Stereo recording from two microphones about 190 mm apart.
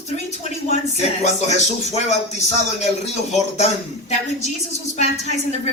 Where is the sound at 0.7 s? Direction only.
35° left (ahead or behind).